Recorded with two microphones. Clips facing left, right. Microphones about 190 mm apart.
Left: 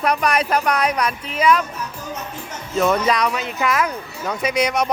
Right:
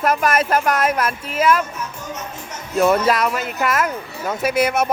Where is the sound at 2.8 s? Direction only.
5° right (ahead or behind).